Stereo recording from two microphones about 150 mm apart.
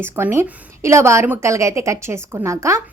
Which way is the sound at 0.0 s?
15° right (ahead or behind).